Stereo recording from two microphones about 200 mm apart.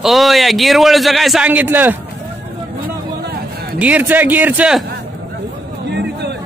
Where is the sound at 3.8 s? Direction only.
10° right (ahead or behind).